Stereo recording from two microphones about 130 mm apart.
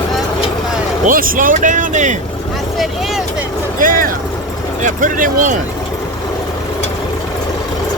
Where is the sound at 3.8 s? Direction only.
90° right.